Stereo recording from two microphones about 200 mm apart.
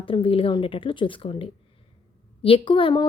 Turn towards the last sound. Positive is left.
turn(degrees=25)  # may be behind; listen again after turning